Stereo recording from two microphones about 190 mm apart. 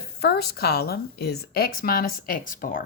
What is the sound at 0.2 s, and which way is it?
A woman's voice, 60° left (ahead or behind).